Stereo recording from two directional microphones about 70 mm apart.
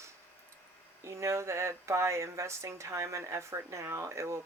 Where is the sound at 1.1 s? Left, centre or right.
Right.